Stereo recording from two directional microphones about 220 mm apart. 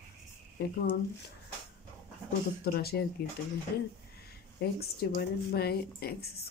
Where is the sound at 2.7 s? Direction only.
45° left (ahead or behind).